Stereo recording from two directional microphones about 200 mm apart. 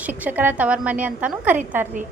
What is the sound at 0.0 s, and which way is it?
A woman's voice, 10° right (ahead or behind).